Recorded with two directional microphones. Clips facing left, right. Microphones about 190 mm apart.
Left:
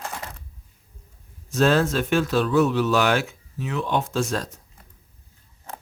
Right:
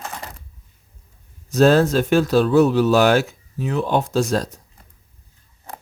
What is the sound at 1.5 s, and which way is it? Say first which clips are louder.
Speech: right 5 dB; 40° right (ahead or behind).